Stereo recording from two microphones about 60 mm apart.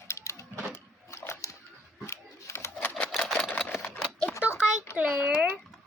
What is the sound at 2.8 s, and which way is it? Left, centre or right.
Typewriter, left.